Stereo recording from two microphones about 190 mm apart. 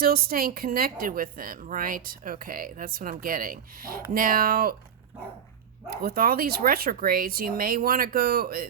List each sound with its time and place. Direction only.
0.0 s speech: 50° right (ahead or behind)
5.9 s speech: 55° right (ahead or behind)